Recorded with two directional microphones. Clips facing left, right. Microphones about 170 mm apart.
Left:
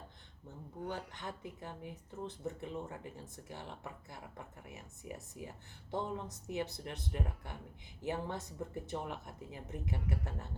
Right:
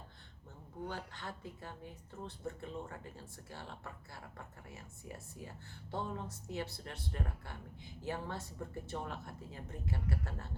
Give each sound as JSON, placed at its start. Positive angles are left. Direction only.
{"t": 0.9, "sound": "speech", "side_deg": 15}